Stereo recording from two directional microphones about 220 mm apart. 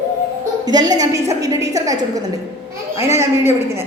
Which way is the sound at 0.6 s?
20° right (ahead or behind).